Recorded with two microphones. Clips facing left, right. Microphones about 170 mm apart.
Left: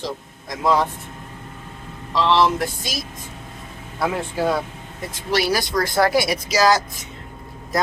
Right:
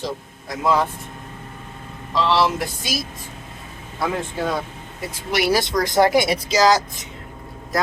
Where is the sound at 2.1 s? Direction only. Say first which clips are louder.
Left 1 dB; 5° right (ahead or behind).